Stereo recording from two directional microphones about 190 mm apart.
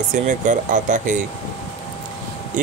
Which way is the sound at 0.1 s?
40° right (ahead or behind).